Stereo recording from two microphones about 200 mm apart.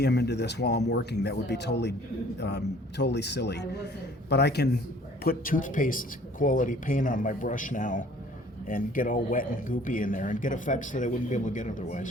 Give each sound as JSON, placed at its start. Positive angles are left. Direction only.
{"t": 0.0, "sound": "speech", "side_deg": 55}